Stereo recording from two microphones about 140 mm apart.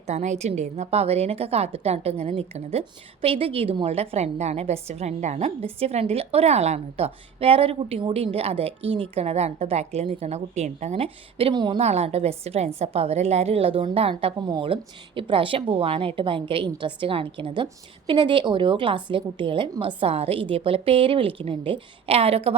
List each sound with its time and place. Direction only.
0.1 s a woman's voice: 55° right (ahead or behind); by 11.8 s 35° right (ahead or behind)
11.8 s a woman's voice: 50° right (ahead or behind)